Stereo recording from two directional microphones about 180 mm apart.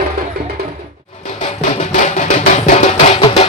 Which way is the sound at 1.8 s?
40° left (ahead or behind).